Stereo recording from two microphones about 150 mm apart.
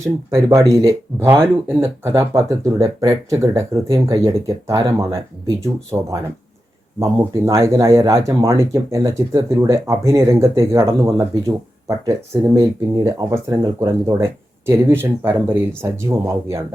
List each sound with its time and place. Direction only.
0.4 s speech: 20° right (ahead or behind)